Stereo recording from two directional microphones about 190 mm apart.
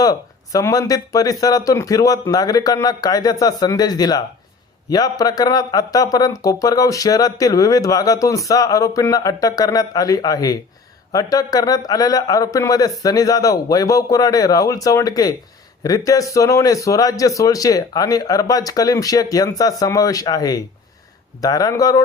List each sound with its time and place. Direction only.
0.0 s speech: 20° left (ahead or behind)